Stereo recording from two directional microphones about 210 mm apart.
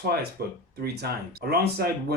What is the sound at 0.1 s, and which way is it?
Speech, 50° right (ahead or behind).